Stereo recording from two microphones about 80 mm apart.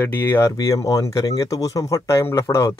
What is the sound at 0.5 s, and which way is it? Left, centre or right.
Speech, left.